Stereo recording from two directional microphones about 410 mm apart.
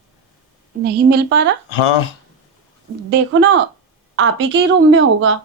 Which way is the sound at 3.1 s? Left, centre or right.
Right.